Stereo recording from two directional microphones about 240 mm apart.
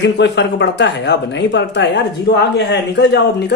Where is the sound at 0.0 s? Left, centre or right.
Left.